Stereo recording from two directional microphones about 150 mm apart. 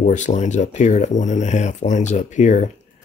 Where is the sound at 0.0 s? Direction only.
55° left (ahead or behind).